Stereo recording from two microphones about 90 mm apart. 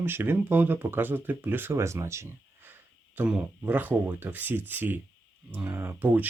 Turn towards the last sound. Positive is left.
turn(degrees=-20)  # may be behind; listen again after turning